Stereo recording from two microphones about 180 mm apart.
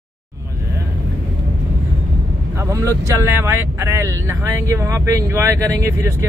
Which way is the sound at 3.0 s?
15° right (ahead or behind).